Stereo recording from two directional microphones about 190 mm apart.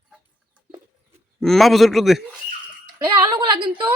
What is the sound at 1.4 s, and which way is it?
Speech, centre (ahead or behind).